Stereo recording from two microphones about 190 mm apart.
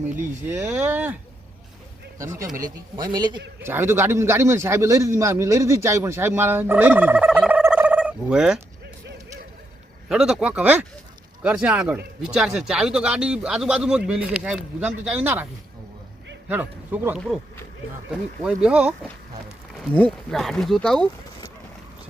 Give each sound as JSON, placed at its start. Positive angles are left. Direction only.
{"t": 0.2, "sound": "a man's voice", "side_deg": -10}
{"t": 3.6, "sound": "a man's voice", "side_deg": -10}
{"t": 10.1, "sound": "speech", "side_deg": -5}
{"t": 16.5, "sound": "a man's voice", "side_deg": -10}
{"t": 19.9, "sound": "speech", "side_deg": 5}